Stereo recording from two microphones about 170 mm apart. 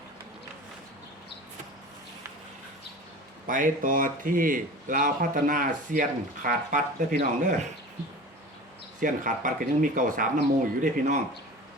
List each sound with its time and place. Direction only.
3.4 s a man's voice: 50° right (ahead or behind)
9.0 s a man's voice: 50° right (ahead or behind)